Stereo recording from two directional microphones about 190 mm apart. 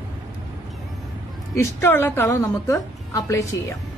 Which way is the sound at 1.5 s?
15° left (ahead or behind).